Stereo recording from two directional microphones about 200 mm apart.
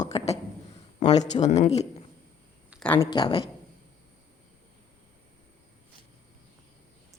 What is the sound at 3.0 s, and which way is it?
Speech, 25° left (ahead or behind).